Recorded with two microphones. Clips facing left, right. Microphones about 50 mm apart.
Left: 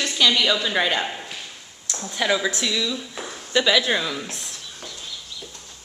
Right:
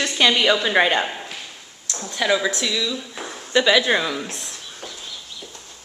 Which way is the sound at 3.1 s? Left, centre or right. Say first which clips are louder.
Right 1 dB; centre.